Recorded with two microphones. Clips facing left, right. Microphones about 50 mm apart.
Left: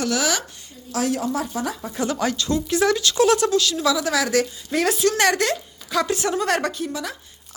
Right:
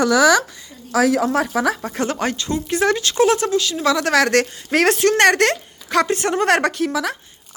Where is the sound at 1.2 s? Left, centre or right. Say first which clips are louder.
Right 6 dB; right.